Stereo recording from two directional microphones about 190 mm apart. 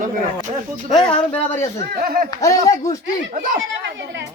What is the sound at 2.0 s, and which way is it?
Speech, 50° right (ahead or behind).